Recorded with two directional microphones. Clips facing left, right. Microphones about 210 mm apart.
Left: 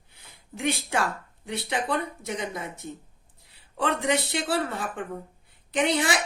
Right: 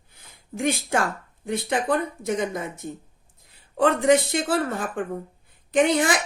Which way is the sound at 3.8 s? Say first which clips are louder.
Right 7 dB; 45° right (ahead or behind).